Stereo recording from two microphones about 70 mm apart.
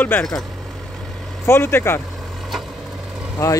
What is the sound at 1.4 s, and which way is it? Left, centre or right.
Speech, left.